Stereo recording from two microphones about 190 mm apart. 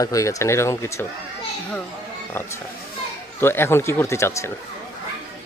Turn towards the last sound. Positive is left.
turn(degrees=15)  # may be behind; listen again after turning